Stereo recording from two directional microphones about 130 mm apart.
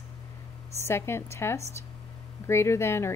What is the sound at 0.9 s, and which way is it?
Speech, 20° left (ahead or behind).